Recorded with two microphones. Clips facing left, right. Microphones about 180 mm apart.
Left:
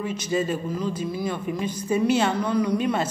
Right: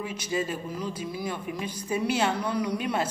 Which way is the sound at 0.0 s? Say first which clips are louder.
Left 5 dB; 10° right (ahead or behind).